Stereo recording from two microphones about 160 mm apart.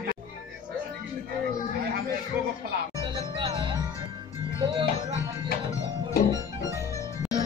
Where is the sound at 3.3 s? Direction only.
30° right (ahead or behind).